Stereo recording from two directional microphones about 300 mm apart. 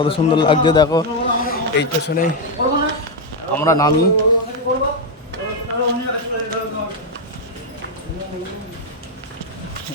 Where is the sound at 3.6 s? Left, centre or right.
Centre.